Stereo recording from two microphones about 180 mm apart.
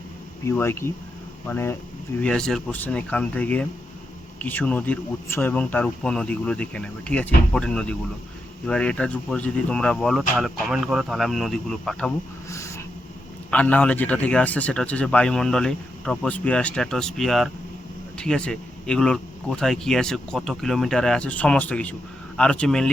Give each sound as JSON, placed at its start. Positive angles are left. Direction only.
{"t": 0.4, "sound": "speech", "side_deg": 15}
{"t": 12.5, "sound": "snort", "side_deg": 15}
{"t": 13.5, "sound": "speech", "side_deg": 10}